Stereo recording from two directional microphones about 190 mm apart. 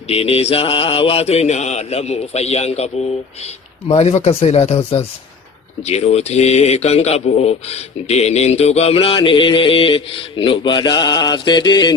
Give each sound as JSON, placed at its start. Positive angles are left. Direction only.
{"t": 0.1, "sound": "speech", "side_deg": 30}